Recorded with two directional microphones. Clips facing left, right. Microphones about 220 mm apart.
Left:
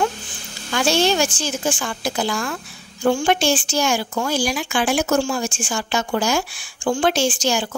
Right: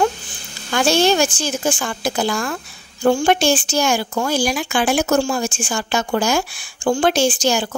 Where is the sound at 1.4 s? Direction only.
45° right (ahead or behind).